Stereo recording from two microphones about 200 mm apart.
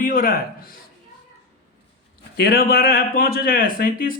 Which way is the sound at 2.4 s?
50° left (ahead or behind).